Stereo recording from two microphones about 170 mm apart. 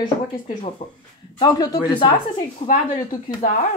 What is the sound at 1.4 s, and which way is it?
A woman's voice, 25° left (ahead or behind).